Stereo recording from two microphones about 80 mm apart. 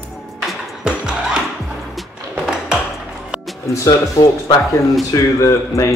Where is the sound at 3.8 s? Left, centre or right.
Left.